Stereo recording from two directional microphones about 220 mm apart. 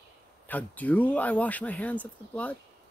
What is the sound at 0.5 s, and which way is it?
Speech, 5° left (ahead or behind).